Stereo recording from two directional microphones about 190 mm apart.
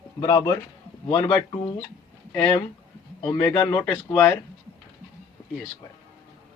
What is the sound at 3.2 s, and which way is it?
Speech, 10° left (ahead or behind).